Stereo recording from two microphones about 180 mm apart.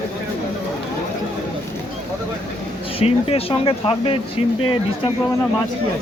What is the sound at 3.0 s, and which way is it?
Speech, 30° left (ahead or behind).